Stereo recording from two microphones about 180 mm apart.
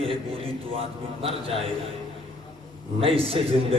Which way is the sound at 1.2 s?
30° right (ahead or behind).